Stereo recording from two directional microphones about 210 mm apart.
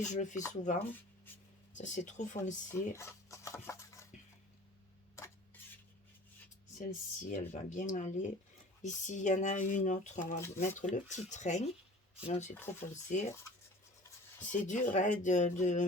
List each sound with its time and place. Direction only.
0.0 s speech: 35° left (ahead or behind)
1.8 s speech: 35° left (ahead or behind)
2.9 s dishes: 15° left (ahead or behind)
6.7 s speech: 40° left (ahead or behind)
14.7 s speech: 35° left (ahead or behind)